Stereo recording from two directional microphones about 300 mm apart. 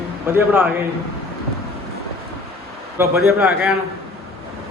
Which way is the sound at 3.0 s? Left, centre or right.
Centre.